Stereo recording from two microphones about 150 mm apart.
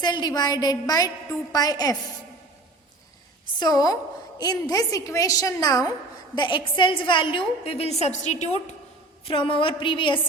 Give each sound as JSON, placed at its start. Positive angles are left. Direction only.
{"t": 0.0, "sound": "a woman's voice", "side_deg": 30}
{"t": 3.6, "sound": "a woman's voice", "side_deg": 25}
{"t": 9.2, "sound": "a woman's voice", "side_deg": 35}